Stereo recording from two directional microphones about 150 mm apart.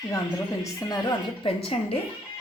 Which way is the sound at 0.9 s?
25° left (ahead or behind).